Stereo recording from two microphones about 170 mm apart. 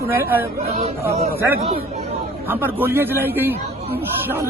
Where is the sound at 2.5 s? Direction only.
10° right (ahead or behind).